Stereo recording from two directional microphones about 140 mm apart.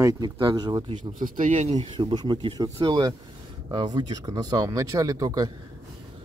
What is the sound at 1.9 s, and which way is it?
Speech, 35° right (ahead or behind).